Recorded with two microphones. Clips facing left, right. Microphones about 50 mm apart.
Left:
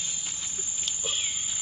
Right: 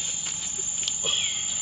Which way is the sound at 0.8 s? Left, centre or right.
Right.